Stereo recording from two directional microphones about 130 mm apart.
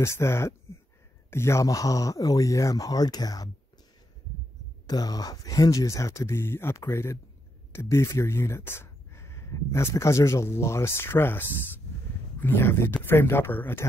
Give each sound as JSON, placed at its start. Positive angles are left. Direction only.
{"t": 0.0, "sound": "speech", "side_deg": 20}
{"t": 4.8, "sound": "speech", "side_deg": 30}